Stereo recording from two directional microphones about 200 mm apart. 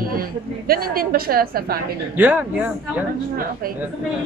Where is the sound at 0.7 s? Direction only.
45° right (ahead or behind).